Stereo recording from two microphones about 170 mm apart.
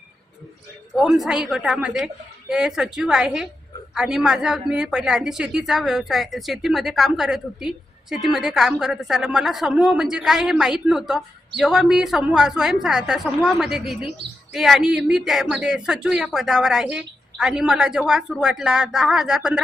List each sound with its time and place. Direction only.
0.9 s a woman's voice: centre (ahead or behind)